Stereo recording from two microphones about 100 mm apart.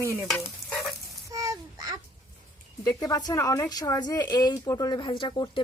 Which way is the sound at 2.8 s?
35° left (ahead or behind).